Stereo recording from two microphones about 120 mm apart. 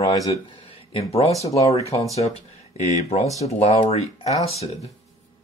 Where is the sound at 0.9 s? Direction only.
55° left (ahead or behind).